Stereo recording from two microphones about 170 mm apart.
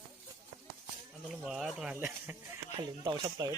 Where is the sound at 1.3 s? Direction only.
Centre (ahead or behind).